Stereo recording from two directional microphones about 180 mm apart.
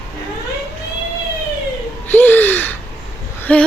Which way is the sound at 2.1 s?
10° left (ahead or behind).